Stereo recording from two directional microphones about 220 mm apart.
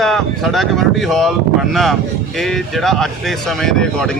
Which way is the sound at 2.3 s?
Centre (ahead or behind).